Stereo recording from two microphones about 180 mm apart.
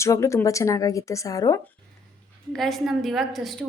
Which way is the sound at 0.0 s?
15° left (ahead or behind).